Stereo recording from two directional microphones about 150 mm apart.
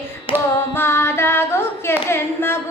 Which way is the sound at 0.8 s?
15° left (ahead or behind).